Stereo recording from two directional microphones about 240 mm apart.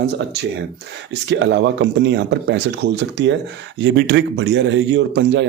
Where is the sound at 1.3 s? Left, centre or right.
Right.